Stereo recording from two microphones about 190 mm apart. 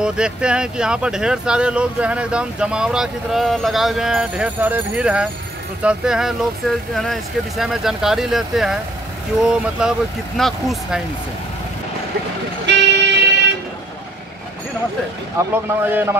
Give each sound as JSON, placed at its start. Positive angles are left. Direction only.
{"t": 0.0, "sound": "speech", "side_deg": -5}
{"t": 12.6, "sound": "vehicle", "side_deg": -65}
{"t": 15.5, "sound": "speech", "side_deg": -10}